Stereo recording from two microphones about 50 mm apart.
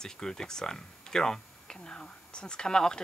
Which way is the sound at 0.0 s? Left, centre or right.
Centre.